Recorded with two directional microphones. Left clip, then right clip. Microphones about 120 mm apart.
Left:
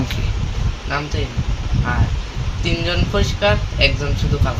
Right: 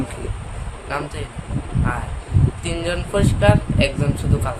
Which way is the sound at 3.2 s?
45° right (ahead or behind).